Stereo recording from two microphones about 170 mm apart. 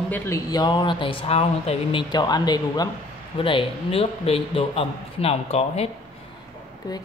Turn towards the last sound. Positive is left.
turn(degrees=20)  # may be behind; listen again after turning